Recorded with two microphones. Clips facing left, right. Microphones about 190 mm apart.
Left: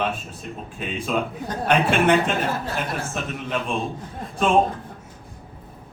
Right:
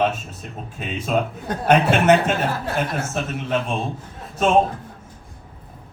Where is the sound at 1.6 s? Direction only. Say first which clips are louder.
Right 3 dB; 40° right (ahead or behind).